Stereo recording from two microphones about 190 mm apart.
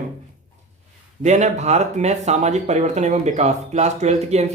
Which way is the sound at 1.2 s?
40° right (ahead or behind).